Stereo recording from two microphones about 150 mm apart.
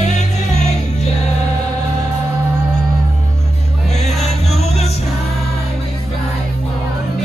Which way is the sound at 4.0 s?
50° left (ahead or behind).